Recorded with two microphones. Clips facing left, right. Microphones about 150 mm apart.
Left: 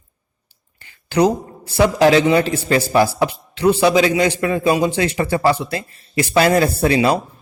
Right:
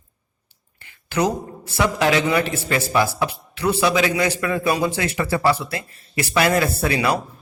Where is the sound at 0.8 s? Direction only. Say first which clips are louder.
Left 6 dB; 30° left (ahead or behind).